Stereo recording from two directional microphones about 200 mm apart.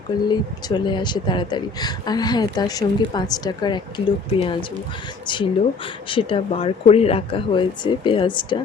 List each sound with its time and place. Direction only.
0.3 s speech: 20° left (ahead or behind)